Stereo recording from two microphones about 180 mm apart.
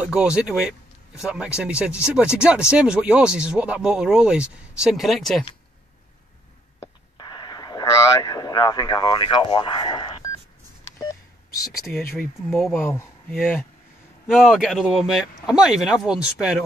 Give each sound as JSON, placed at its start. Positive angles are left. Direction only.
{"t": 0.0, "sound": "speech", "side_deg": -5}
{"t": 6.8, "sound": "radio", "side_deg": 25}
{"t": 11.0, "sound": "telephone dialing", "side_deg": 15}
{"t": 12.4, "sound": "speech", "side_deg": 0}
{"t": 12.7, "sound": "speech", "side_deg": 15}